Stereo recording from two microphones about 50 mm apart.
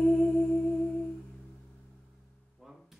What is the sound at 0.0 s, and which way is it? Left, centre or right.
Music, centre.